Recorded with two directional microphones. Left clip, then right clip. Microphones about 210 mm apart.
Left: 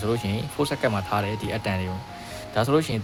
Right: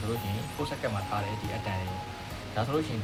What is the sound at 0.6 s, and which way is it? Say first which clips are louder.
Speech: left 9 dB; 45° left (ahead or behind).